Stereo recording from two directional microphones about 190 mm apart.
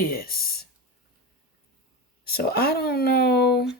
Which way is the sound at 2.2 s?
55° left (ahead or behind).